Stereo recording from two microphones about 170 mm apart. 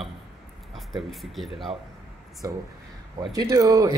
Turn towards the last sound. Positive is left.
turn(degrees=-20)  # may be behind; listen again after turning